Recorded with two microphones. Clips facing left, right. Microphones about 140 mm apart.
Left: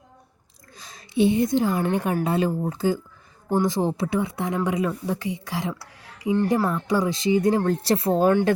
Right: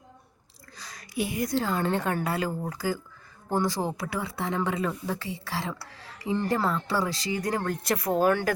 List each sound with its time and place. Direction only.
0.8 s a woman's voice: 25° left (ahead or behind)